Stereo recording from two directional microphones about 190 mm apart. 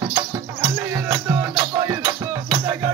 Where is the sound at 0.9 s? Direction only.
15° right (ahead or behind).